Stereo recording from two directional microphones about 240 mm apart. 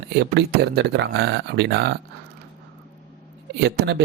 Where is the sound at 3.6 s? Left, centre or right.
Right.